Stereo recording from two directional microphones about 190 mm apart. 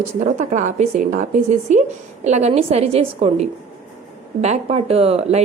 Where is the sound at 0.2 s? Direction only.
40° right (ahead or behind).